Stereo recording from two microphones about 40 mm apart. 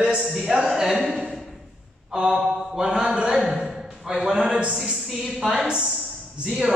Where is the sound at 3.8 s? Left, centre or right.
Centre.